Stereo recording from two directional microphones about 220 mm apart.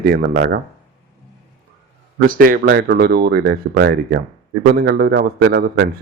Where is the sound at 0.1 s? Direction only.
45° right (ahead or behind).